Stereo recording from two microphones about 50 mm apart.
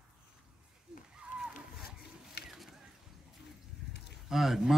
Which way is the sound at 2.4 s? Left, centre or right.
Centre.